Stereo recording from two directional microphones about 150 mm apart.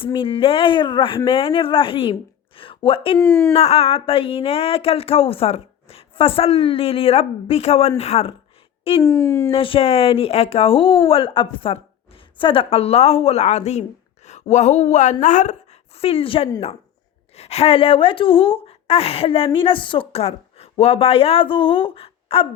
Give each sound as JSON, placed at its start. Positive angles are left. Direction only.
{"t": 0.0, "sound": "speech", "side_deg": 35}
{"t": 2.6, "sound": "a sound", "side_deg": 35}
{"t": 3.2, "sound": "speech", "side_deg": 15}
{"t": 3.5, "sound": "speech", "side_deg": 40}
{"t": 9.0, "sound": "speech", "side_deg": 20}
{"t": 9.5, "sound": "a woman's voice", "side_deg": 35}
{"t": 16.0, "sound": "speech", "side_deg": 40}